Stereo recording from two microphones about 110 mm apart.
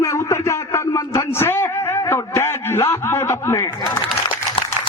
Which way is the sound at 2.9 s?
25° left (ahead or behind).